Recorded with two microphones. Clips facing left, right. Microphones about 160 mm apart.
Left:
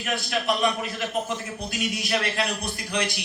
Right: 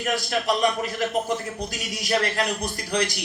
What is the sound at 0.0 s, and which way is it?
A man's voice, 40° right (ahead or behind).